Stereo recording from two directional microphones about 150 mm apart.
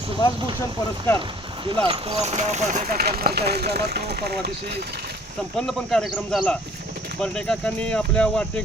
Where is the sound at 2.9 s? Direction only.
90° right.